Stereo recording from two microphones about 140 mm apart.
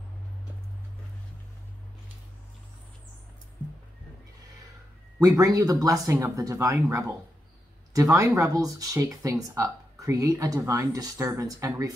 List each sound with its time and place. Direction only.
5.2 s speech: 25° right (ahead or behind)